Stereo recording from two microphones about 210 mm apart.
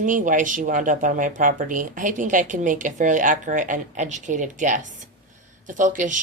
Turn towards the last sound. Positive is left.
turn(degrees=-35)  # may be behind; listen again after turning